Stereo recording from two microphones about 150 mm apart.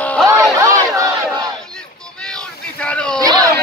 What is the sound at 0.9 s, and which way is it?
Battle cry, 20° right (ahead or behind).